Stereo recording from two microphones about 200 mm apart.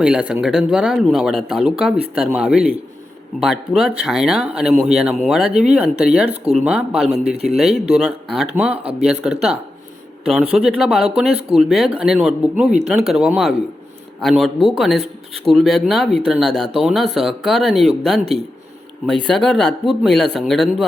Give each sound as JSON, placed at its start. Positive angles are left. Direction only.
{"t": 0.0, "sound": "speech", "side_deg": -5}
{"t": 6.2, "sound": "speech", "side_deg": -30}
{"t": 6.7, "sound": "speech", "side_deg": 0}
{"t": 7.1, "sound": "speech", "side_deg": -30}
{"t": 7.5, "sound": "speech", "side_deg": 0}
{"t": 8.8, "sound": "speech", "side_deg": -30}
{"t": 9.2, "sound": "speech", "side_deg": -5}